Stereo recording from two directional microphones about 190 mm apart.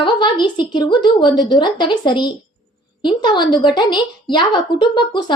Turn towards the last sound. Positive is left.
turn(degrees=25)  # may be behind; listen again after turning